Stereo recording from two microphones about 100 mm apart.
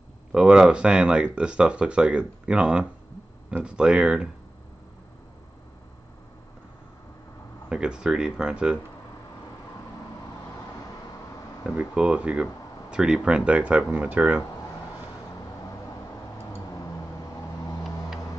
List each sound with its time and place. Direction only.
0.3 s speech: 5° right (ahead or behind)
7.7 s speech: 10° right (ahead or behind)
11.6 s speech: 10° right (ahead or behind)
16.5 s a sound: 35° left (ahead or behind)